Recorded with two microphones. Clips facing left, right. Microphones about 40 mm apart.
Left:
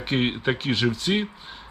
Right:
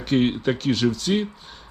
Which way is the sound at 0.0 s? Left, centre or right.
Left.